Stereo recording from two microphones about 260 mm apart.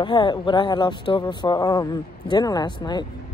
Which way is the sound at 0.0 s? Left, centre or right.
Centre.